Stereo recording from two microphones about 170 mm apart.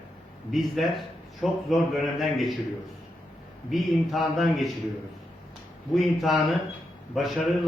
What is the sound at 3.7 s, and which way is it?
A man's voice, centre (ahead or behind).